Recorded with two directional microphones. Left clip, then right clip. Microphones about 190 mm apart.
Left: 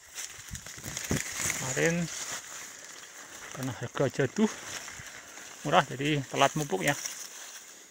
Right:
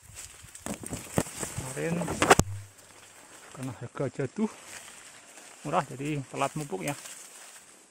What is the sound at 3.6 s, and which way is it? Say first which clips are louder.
Speech: left 4 dB; centre (ahead or behind).